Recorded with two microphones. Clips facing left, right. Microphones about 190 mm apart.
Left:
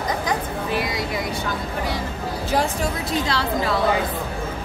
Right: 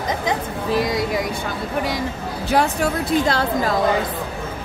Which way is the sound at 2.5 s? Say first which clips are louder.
Right 4 dB; 55° right (ahead or behind).